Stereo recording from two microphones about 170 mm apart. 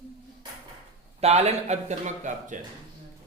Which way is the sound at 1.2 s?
40° right (ahead or behind).